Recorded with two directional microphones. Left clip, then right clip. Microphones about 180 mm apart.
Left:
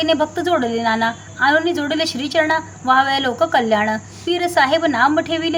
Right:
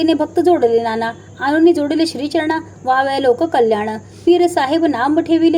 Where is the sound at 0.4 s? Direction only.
20° right (ahead or behind).